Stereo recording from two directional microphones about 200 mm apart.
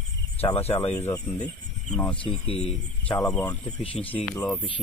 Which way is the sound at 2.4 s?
30° left (ahead or behind).